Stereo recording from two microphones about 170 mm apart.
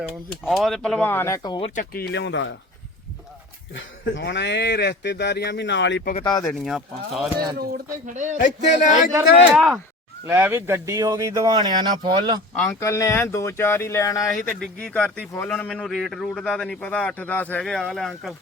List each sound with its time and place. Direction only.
0.4 s speech: centre (ahead or behind); by 1.6 s 25° left (ahead or behind)
1.6 s speech: 50° left (ahead or behind); by 2.6 s 90° left
4.1 s speech: 90° left
6.4 s a man's voice: centre (ahead or behind)
7.5 s speech: 65° right (ahead or behind)
8.0 s speech: 45° right (ahead or behind)
8.4 s speech: 45° left (ahead or behind)
9.6 s a man's voice: centre (ahead or behind)
10.2 s speech: 15° right (ahead or behind)
12.8 s speech: 15° left (ahead or behind)
14.5 s a man's voice: 5° left (ahead or behind)